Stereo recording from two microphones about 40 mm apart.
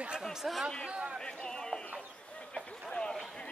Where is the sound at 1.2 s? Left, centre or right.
Centre.